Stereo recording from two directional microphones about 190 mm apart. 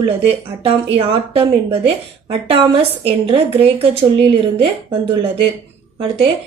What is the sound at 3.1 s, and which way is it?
A woman's voice, 30° right (ahead or behind).